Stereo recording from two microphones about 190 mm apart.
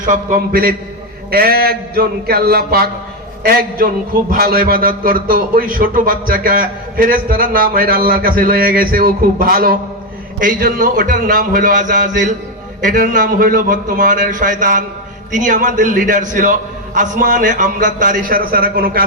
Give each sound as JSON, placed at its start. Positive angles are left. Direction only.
{"t": 0.0, "sound": "a man's voice", "side_deg": -45}
{"t": 1.3, "sound": "a sound", "side_deg": -50}
{"t": 3.4, "sound": "a man's voice", "side_deg": -55}